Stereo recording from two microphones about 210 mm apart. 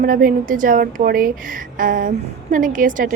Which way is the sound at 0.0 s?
40° right (ahead or behind).